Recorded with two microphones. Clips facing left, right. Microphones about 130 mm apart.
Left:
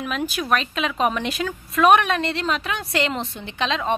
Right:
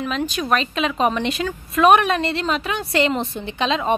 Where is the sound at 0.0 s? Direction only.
5° left (ahead or behind).